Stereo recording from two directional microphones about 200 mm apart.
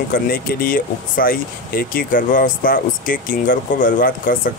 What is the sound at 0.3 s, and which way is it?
Speech, 45° left (ahead or behind).